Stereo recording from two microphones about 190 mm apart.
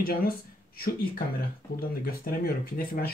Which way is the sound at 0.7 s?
55° left (ahead or behind).